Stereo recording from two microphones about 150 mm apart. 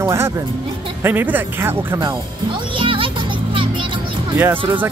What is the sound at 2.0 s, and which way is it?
Music, 30° right (ahead or behind).